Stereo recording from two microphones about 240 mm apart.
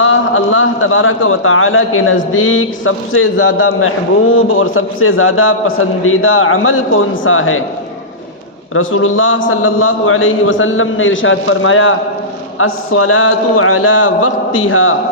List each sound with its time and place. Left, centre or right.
0.0 s a man's voice: left
4.4 s a man's voice: left
8.7 s a man's voice: left